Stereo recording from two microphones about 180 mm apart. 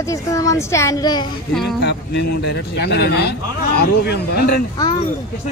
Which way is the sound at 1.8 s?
75° left (ahead or behind).